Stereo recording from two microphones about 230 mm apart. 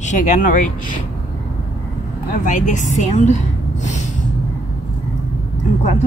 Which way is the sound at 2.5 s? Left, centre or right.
Left.